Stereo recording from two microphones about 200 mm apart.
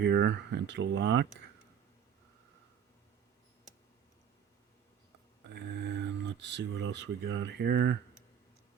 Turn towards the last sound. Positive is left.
turn(degrees=-60)  # may be behind; listen again after turning